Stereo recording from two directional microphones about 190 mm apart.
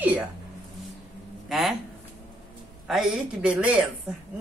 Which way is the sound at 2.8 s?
Centre (ahead or behind).